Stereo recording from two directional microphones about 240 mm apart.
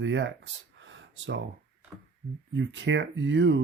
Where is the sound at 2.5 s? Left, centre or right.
Right.